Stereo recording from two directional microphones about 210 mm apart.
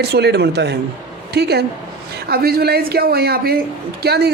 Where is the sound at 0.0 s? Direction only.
50° right (ahead or behind).